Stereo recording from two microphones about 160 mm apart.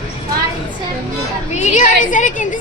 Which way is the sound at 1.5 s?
45° left (ahead or behind).